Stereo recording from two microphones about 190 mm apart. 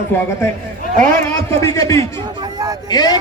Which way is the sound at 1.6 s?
15° left (ahead or behind).